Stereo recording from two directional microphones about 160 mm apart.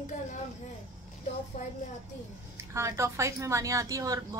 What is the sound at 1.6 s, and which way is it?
Speech, 50° left (ahead or behind).